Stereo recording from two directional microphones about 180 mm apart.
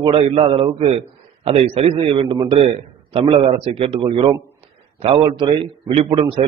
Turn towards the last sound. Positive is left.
turn(degrees=-30)  # may be behind; listen again after turning